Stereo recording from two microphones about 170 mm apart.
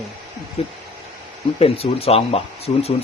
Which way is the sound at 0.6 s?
35° left (ahead or behind).